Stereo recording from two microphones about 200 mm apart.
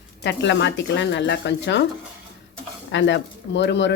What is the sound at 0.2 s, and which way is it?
Speech, 60° left (ahead or behind).